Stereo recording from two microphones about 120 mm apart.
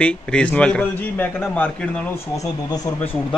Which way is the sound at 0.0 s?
10° left (ahead or behind).